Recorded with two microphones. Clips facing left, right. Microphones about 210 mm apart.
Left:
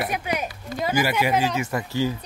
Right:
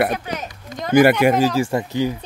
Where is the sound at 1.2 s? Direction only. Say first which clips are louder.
Right 7 dB; 40° right (ahead or behind); by 2.2 s 20° right (ahead or behind).